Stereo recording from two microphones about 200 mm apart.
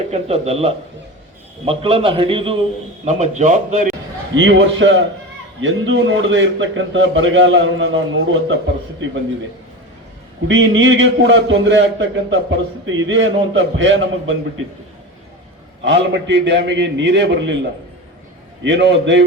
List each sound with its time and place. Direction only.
0.1 s a man's voice: 30° right (ahead or behind)
4.4 s a man's voice: 65° right (ahead or behind)
10.5 s a man's voice: 65° right (ahead or behind)
15.8 s a man's voice: 65° right (ahead or behind)
18.6 s a man's voice: 65° right (ahead or behind)